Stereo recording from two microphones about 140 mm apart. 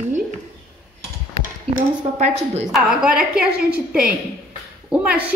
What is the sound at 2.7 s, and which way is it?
A woman's voice, 5° right (ahead or behind).